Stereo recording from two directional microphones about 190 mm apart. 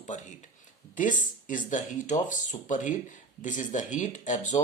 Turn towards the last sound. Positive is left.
turn(degrees=40)  # may be behind; listen again after turning